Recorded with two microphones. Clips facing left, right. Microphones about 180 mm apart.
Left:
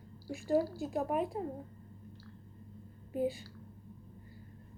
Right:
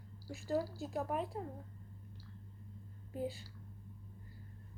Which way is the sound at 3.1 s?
15° left (ahead or behind).